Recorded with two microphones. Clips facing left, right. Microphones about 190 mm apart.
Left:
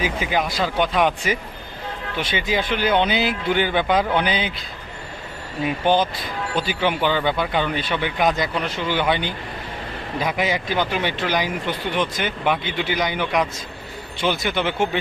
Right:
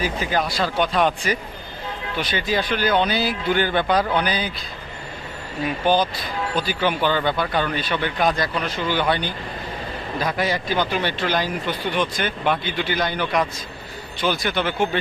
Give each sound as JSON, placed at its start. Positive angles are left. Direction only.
{"t": 0.0, "sound": "speech", "side_deg": 15}
{"t": 5.6, "sound": "speech", "side_deg": 20}
{"t": 14.3, "sound": "speech", "side_deg": 15}